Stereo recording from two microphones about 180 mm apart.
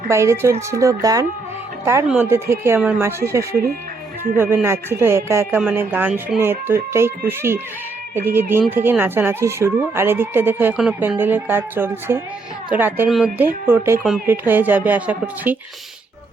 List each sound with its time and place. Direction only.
0.1 s speech: 15° right (ahead or behind)